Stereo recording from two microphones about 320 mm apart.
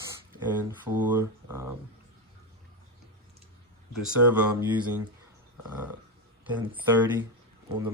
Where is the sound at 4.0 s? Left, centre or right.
Centre.